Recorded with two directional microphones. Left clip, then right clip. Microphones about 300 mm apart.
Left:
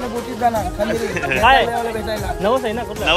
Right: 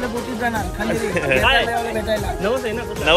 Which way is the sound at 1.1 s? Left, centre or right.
Centre.